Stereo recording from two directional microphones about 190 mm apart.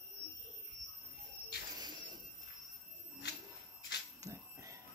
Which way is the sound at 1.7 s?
20° right (ahead or behind).